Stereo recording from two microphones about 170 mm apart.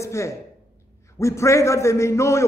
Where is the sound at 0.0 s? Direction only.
15° left (ahead or behind).